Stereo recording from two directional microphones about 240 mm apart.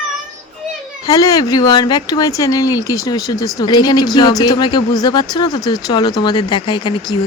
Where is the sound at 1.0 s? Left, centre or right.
Centre.